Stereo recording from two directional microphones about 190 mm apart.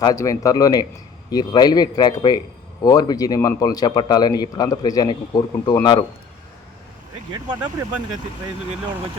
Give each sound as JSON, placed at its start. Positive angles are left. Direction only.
{"t": 0.0, "sound": "a man's voice", "side_deg": 15}
{"t": 7.3, "sound": "speech", "side_deg": -20}